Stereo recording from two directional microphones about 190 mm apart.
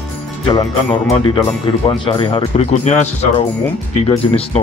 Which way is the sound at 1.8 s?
25° left (ahead or behind).